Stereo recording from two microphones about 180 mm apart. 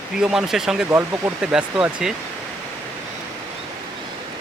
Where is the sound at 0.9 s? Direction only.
15° right (ahead or behind).